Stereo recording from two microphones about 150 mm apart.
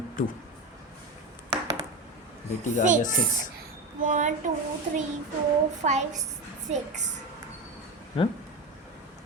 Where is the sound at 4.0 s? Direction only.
60° right (ahead or behind).